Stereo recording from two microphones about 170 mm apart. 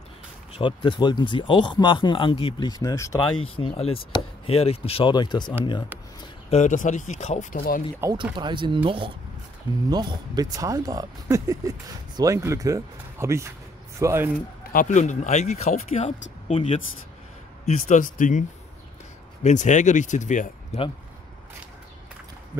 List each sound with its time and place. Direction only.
0.6 s speech: 30° left (ahead or behind)
3.3 s speech: 30° left (ahead or behind)
6.5 s speech: 45° left (ahead or behind)
8.0 s speech: 25° right (ahead or behind)
14.7 s speech: 50° left (ahead or behind)
17.6 s speech: 45° left (ahead or behind)
19.4 s speech: 45° left (ahead or behind)